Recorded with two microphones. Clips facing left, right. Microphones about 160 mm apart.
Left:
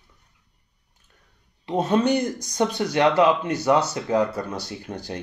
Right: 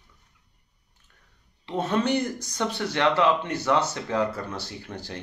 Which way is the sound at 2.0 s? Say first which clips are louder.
Left 3 dB; 15° left (ahead or behind).